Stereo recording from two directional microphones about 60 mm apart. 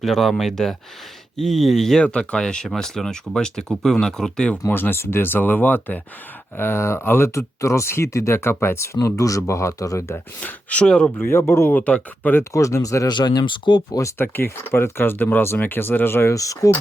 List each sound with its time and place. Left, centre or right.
0.0 s speech: centre
2.0 s speech: centre
4.7 s speech: left
6.6 s speech: left
7.3 s speech: left
9.0 s speech: left
10.4 s speech: left
11.2 s speech: left
11.7 s speech: left
12.5 s speech: left
14.2 s speech: left
16.3 s speech: left